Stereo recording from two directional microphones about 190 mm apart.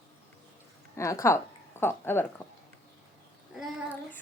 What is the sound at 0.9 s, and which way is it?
Speech, 15° left (ahead or behind).